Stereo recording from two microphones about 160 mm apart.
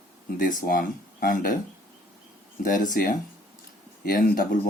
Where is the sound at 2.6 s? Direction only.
55° left (ahead or behind).